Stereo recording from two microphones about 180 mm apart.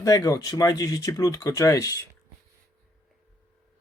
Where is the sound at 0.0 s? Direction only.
20° left (ahead or behind).